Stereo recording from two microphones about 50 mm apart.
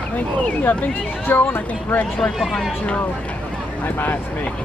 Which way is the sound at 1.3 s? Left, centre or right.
Left.